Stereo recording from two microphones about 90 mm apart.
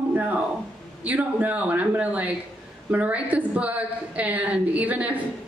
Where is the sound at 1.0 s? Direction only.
15° right (ahead or behind).